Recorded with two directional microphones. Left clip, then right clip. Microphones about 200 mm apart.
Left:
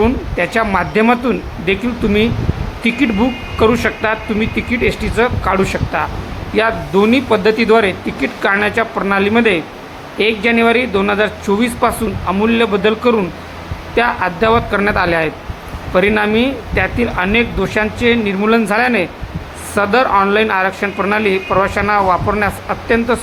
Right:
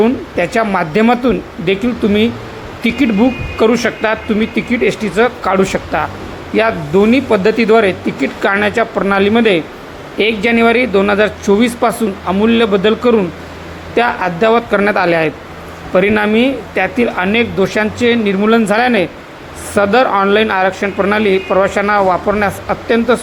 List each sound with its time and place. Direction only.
0.0 s speech: 15° right (ahead or behind)